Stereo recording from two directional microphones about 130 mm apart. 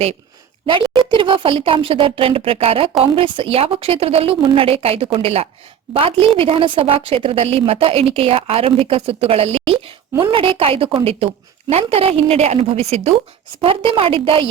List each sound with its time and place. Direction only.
0.7 s a woman's voice: 40° right (ahead or behind)